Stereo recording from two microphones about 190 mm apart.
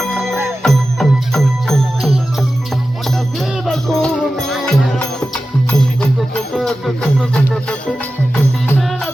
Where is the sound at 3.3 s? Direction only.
Centre (ahead or behind).